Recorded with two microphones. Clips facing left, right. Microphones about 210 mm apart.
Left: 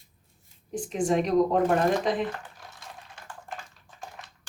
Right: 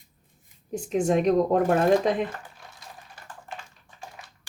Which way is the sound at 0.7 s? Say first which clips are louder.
Right 2 dB; 40° right (ahead or behind).